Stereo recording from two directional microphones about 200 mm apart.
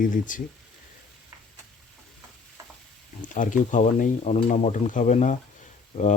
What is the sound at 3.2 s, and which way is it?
Speech, 40° left (ahead or behind).